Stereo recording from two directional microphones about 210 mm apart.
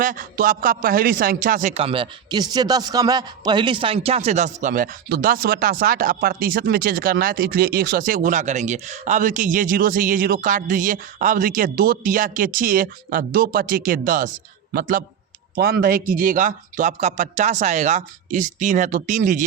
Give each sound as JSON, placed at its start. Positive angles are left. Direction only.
{"t": 0.0, "sound": "a man's voice", "side_deg": -40}